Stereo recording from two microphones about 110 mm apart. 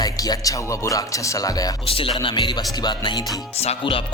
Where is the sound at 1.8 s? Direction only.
55° left (ahead or behind).